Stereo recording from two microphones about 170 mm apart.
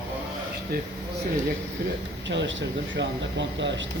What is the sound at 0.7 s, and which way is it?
Speech, 65° right (ahead or behind).